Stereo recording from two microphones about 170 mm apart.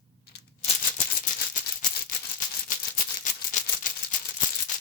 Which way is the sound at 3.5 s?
45° left (ahead or behind).